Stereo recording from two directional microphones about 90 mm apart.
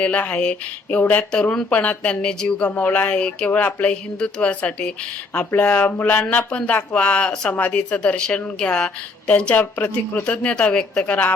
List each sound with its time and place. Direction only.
0.0 s speech: 15° left (ahead or behind)